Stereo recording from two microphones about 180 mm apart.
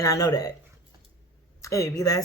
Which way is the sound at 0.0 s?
20° left (ahead or behind).